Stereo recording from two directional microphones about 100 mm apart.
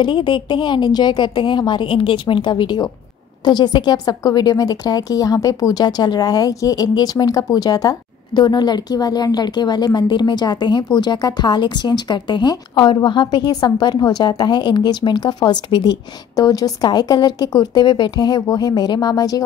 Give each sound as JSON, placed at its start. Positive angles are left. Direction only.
{"t": 0.0, "sound": "a woman's voice", "side_deg": 55}
{"t": 16.3, "sound": "speech", "side_deg": 40}